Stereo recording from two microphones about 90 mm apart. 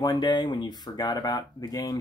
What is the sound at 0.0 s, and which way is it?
Speech, 55° left (ahead or behind).